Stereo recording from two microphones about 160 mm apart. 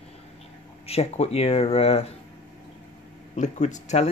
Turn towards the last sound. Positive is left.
turn(degrees=45)  # may be behind; listen again after turning